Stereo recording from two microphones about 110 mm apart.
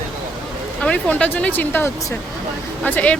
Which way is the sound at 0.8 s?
10° left (ahead or behind).